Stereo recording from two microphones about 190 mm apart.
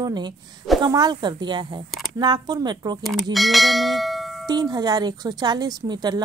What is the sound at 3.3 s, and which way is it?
Bell, centre (ahead or behind).